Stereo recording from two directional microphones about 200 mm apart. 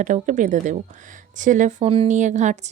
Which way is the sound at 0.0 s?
40° right (ahead or behind).